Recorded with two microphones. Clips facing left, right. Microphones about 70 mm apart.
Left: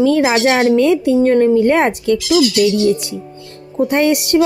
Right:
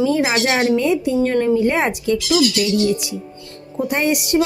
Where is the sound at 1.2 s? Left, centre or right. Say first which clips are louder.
Left 6 dB; left.